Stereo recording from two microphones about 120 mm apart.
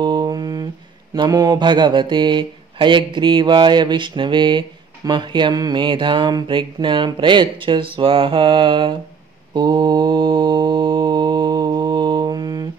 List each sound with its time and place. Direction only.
0.0 s a sound: 40° right (ahead or behind)
1.1 s speech: 35° right (ahead or behind)
9.5 s mantra: 40° right (ahead or behind)